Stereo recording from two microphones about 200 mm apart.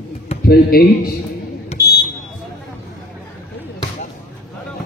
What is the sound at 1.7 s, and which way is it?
Smoke detector, 30° left (ahead or behind).